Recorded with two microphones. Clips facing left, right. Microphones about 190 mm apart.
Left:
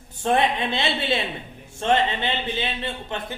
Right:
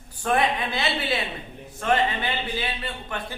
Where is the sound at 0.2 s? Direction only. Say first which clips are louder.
Left 2 dB; 25° left (ahead or behind).